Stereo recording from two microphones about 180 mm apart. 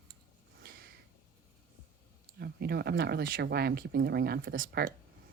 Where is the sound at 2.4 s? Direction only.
65° right (ahead or behind).